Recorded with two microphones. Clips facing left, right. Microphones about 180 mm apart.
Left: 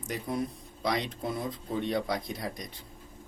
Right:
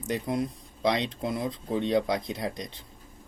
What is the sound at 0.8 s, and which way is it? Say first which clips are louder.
Speech: right 4 dB; 25° right (ahead or behind).